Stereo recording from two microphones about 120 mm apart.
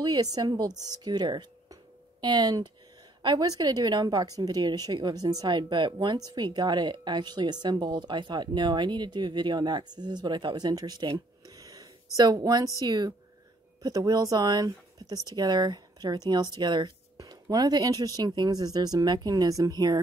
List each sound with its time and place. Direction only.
0.0 s a woman's voice: 35° right (ahead or behind)